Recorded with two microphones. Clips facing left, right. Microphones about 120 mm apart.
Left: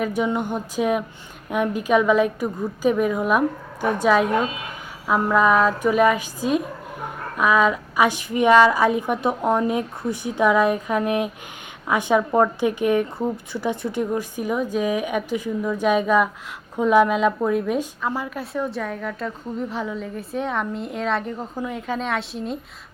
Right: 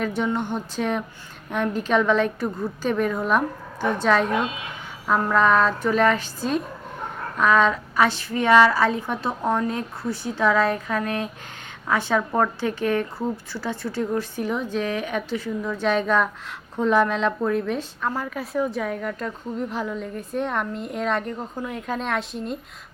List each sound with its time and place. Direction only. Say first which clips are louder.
0.0 s a woman's voice: left 2 dB; 10° left (ahead or behind)